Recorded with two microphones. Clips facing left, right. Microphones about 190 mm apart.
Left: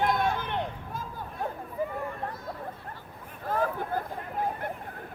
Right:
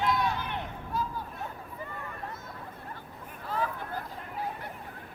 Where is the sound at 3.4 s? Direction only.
50° left (ahead or behind).